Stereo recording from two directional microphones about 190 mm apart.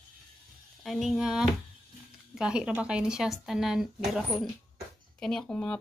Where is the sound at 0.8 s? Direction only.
Centre (ahead or behind).